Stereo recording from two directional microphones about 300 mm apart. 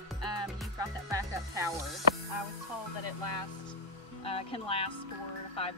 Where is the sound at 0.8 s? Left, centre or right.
Centre.